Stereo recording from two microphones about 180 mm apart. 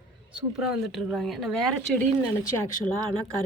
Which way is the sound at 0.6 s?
Centre (ahead or behind).